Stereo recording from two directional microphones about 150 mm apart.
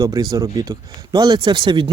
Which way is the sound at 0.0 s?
25° right (ahead or behind).